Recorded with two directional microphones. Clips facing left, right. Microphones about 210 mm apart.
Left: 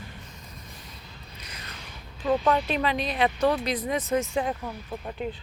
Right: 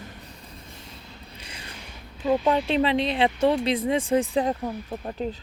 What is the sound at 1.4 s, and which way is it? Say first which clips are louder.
Mechanisms: right 1 dB; 30° right (ahead or behind).